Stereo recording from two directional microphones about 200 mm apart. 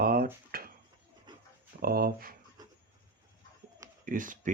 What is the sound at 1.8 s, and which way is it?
Speech, 50° right (ahead or behind).